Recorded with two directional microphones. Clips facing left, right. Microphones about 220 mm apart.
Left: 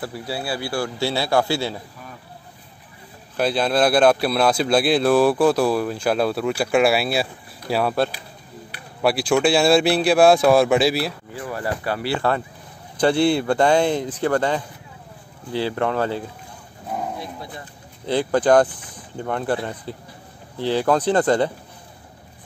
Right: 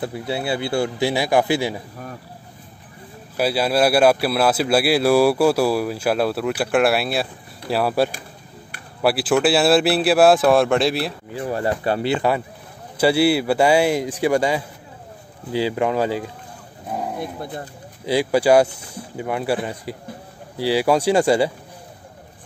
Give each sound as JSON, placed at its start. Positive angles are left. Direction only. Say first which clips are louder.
{"t": 0.0, "sound": "a man's voice", "louder": "right 3 dB", "side_deg": -20}
{"t": 3.3, "sound": "a man's voice", "louder": "right 1 dB", "side_deg": -5}
{"t": 11.3, "sound": "a man's voice", "louder": "right 7 dB", "side_deg": -25}
{"t": 17.2, "sound": "speech", "louder": "right 5 dB", "side_deg": -50}
{"t": 18.0, "sound": "a man's voice", "louder": "right 1 dB", "side_deg": -10}